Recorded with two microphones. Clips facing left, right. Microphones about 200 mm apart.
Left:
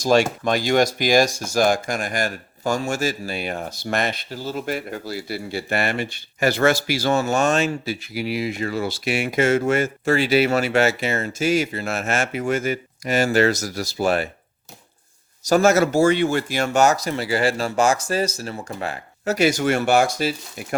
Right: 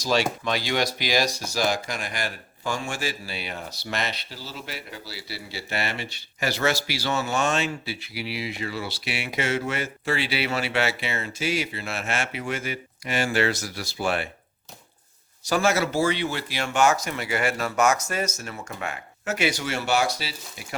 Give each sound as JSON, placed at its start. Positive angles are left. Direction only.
{"t": 0.0, "sound": "speech", "side_deg": 50}
{"t": 15.4, "sound": "speech", "side_deg": 45}